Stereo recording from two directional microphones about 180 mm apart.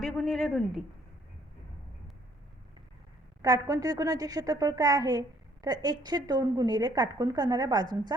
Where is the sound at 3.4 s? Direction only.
20° right (ahead or behind).